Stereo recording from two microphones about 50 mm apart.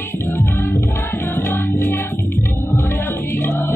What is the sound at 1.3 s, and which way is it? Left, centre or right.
Music, left.